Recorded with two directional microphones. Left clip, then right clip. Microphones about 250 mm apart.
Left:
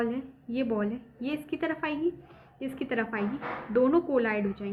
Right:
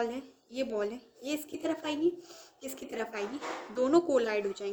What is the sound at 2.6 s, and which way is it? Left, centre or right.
A woman's voice, right.